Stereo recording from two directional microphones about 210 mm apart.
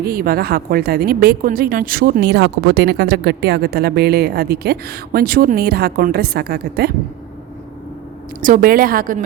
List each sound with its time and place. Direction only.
0.0 s a woman's voice: 45° right (ahead or behind)
8.4 s a woman's voice: 40° right (ahead or behind)